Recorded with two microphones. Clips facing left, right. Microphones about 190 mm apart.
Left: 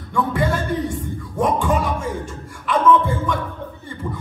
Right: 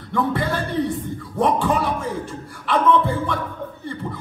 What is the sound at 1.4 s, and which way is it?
Music, 35° right (ahead or behind).